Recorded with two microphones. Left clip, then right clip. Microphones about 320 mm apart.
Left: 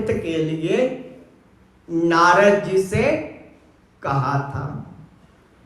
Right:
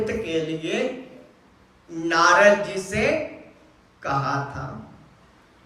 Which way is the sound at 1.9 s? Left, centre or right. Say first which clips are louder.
Left 3 dB; centre.